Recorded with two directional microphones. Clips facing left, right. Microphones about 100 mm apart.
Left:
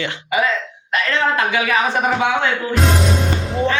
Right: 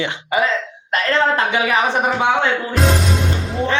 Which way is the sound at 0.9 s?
30° right (ahead or behind).